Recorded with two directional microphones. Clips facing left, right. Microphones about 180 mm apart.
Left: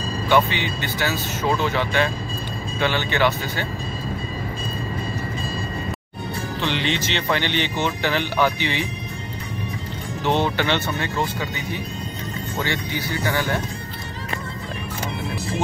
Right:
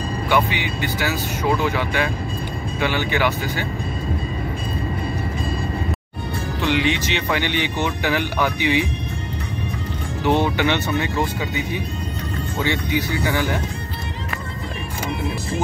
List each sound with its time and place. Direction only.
0.3 s speech: 10° right (ahead or behind)
6.6 s speech: 10° right (ahead or behind)
10.2 s speech: 10° right (ahead or behind)